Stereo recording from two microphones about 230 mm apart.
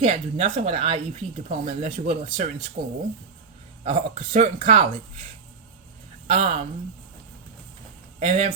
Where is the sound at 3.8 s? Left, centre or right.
Right.